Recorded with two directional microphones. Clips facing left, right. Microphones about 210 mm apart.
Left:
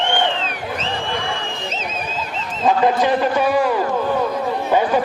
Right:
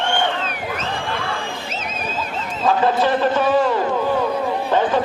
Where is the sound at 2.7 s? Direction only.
15° left (ahead or behind).